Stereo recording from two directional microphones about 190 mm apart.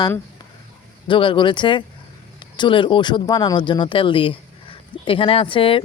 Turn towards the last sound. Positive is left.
turn(degrees=30)  # may be behind; listen again after turning